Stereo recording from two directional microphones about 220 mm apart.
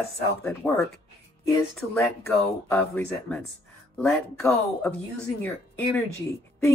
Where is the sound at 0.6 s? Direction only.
5° left (ahead or behind).